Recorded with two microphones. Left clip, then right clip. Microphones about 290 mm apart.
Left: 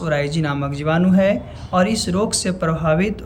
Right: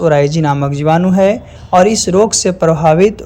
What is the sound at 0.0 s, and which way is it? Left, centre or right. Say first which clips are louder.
Speech: right 10 dB; centre.